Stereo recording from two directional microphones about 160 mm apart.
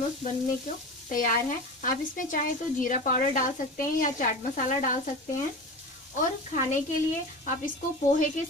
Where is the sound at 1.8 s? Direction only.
55° left (ahead or behind).